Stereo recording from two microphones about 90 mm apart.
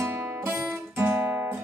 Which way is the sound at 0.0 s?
25° right (ahead or behind).